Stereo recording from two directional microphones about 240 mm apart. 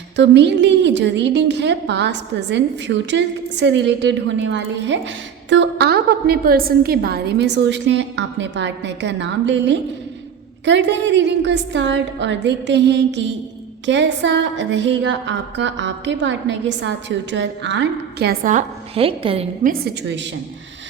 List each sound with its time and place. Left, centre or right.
0.2 s a woman's voice: right
19.6 s a woman's voice: right